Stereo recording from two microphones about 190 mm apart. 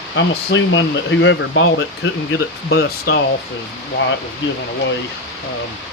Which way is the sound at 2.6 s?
60° left (ahead or behind).